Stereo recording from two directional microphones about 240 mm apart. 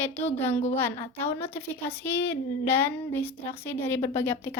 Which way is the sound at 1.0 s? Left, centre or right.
Left.